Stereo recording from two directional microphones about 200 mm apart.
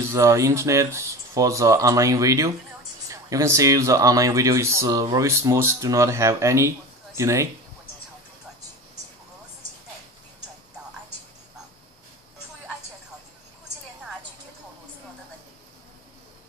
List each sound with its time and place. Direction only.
0.0 s speech: 15° right (ahead or behind)